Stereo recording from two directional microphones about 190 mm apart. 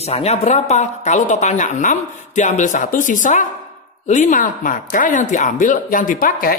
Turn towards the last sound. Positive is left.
turn(degrees=50)  # may be behind; listen again after turning